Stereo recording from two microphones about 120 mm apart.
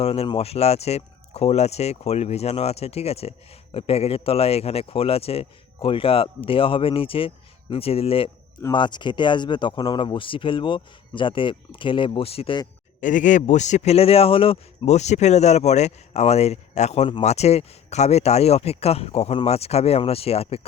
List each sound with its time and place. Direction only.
0.0 s speech: 55° left (ahead or behind)
8.7 s speech: 40° left (ahead or behind)
13.0 s a man's voice: 90° left; by 20.6 s 55° left (ahead or behind)